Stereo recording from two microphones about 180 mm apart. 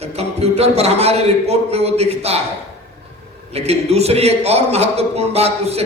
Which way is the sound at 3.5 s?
35° right (ahead or behind).